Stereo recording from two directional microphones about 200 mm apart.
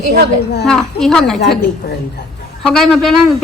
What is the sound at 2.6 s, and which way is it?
Speech, centre (ahead or behind).